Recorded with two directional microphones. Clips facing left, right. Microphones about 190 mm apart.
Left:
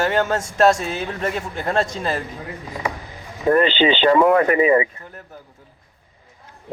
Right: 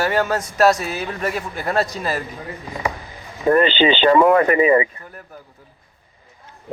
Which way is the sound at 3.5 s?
70° right (ahead or behind).